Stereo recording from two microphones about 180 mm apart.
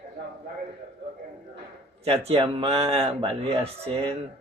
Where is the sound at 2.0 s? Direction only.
35° right (ahead or behind).